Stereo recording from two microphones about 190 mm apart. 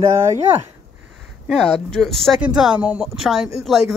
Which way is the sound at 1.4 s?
5° left (ahead or behind).